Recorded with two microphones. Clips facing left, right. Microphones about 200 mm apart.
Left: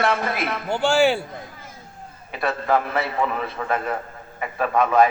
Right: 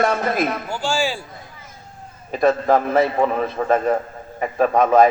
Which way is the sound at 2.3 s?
40° right (ahead or behind).